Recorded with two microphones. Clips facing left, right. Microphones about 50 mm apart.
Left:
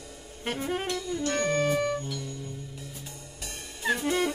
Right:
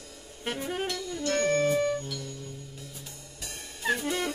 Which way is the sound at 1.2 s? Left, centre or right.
Centre.